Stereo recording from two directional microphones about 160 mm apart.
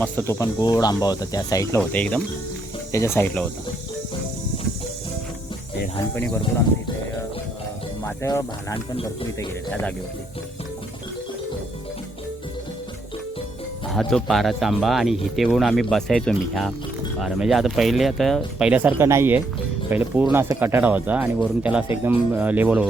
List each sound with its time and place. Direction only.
0.0 s speech: 15° left (ahead or behind)
1.8 s speech: 10° left (ahead or behind)
8.0 s speech: 20° left (ahead or behind)
13.9 s speech: centre (ahead or behind)